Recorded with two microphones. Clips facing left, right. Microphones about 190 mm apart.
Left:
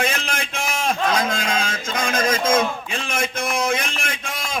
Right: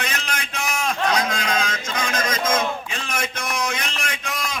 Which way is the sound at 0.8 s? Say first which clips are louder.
Left 1 dB; 50° left (ahead or behind).